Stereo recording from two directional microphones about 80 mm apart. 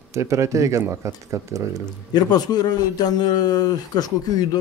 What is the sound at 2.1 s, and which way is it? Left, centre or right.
A man's voice, left.